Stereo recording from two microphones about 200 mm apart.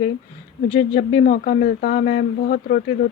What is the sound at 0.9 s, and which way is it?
Speech, 40° left (ahead or behind).